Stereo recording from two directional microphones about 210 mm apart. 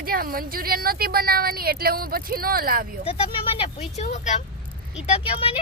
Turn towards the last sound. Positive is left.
turn(degrees=25)  # may be behind; listen again after turning